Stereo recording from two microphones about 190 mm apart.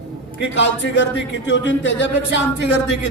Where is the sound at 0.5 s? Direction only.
70° left (ahead or behind).